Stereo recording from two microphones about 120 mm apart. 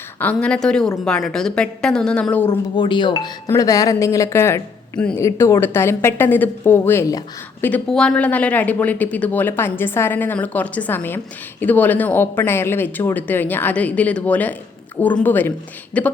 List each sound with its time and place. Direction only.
0.2 s speech: 10° left (ahead or behind)
2.5 s a woman's voice: 40° left (ahead or behind); by 7.0 s 20° left (ahead or behind)
7.9 s speech: 5° left (ahead or behind)